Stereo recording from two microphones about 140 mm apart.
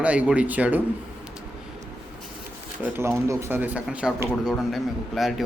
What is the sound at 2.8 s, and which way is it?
A man's voice, 15° right (ahead or behind).